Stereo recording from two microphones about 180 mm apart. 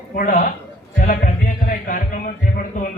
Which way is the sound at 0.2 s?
50° left (ahead or behind).